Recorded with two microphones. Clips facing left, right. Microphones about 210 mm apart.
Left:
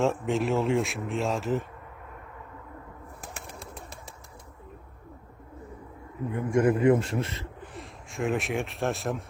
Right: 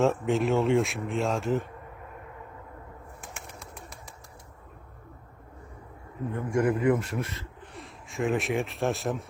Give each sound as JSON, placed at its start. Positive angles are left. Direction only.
{"t": 0.0, "sound": "a man's voice", "side_deg": 0}
{"t": 3.2, "sound": "bird", "side_deg": 35}
{"t": 6.3, "sound": "a man's voice", "side_deg": 20}
{"t": 7.7, "sound": "speech", "side_deg": 0}